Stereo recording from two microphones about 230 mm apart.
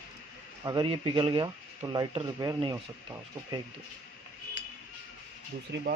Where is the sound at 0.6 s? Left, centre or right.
Centre.